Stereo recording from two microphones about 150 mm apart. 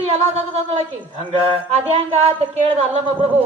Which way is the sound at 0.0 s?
45° right (ahead or behind).